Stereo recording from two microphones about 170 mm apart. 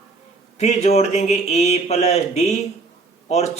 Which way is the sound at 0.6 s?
40° left (ahead or behind).